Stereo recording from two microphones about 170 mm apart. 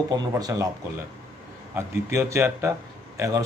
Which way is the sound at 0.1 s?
20° right (ahead or behind).